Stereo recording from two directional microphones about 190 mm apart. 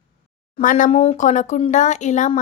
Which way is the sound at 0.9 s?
30° left (ahead or behind).